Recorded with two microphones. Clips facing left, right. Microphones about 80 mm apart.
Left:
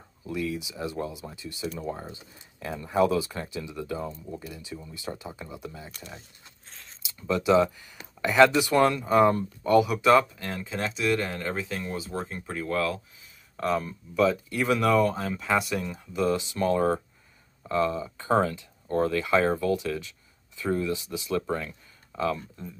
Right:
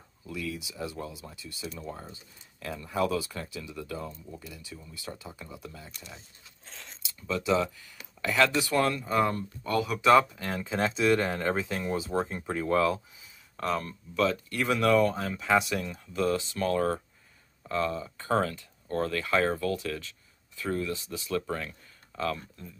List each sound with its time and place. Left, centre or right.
0.3 s speech: left
5.9 s speech: left
7.2 s speech: centre
10.3 s speech: centre
13.6 s speech: centre